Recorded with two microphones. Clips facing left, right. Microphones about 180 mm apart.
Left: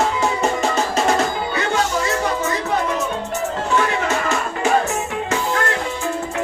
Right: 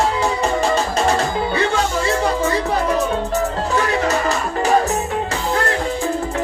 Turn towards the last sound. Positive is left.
turn(degrees=-35)  # may be behind; listen again after turning